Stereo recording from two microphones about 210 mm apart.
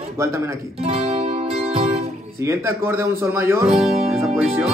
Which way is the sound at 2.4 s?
10° right (ahead or behind).